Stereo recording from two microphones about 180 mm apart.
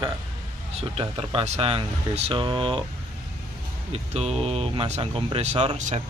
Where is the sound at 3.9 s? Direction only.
35° right (ahead or behind).